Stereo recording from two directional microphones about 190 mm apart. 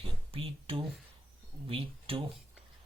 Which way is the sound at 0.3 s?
30° right (ahead or behind).